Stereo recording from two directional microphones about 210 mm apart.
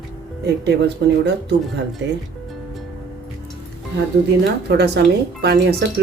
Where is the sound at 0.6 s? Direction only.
55° right (ahead or behind).